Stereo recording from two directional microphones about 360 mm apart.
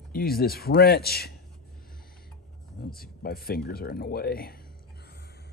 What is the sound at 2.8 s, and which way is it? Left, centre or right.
Speech, left.